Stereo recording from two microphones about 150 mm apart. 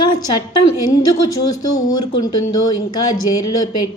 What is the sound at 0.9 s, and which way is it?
A woman's voice, 25° left (ahead or behind).